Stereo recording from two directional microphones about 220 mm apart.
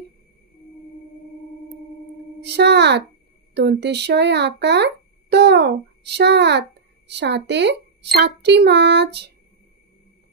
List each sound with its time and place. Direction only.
2.4 s a child's voice: 50° right (ahead or behind)